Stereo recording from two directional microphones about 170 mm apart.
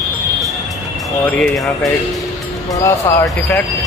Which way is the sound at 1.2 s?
5° left (ahead or behind).